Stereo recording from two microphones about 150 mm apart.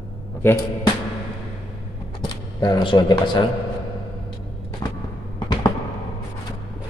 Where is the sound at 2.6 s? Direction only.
30° left (ahead or behind).